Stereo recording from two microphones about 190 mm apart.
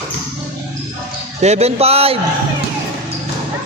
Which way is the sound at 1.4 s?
35° right (ahead or behind).